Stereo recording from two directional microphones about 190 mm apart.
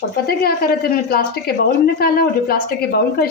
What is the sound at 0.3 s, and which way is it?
A woman's voice, 50° left (ahead or behind).